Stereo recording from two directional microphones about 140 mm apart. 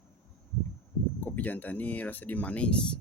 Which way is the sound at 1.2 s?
10° left (ahead or behind).